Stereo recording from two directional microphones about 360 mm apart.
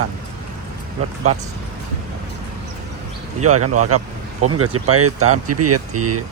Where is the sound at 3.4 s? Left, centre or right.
Right.